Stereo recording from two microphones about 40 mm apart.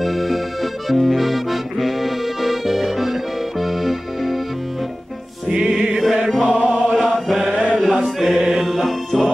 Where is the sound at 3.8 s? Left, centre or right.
Centre.